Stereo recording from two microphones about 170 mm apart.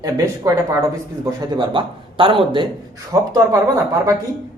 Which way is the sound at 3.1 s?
20° right (ahead or behind).